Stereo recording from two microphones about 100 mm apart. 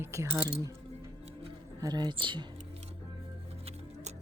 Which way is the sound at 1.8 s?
45° right (ahead or behind).